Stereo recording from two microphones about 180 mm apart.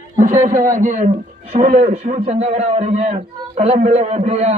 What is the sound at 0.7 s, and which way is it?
A man's voice, 45° right (ahead or behind).